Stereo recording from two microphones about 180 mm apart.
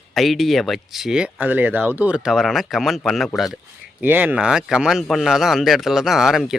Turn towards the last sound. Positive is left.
turn(degrees=0)  # may be behind; listen again after turning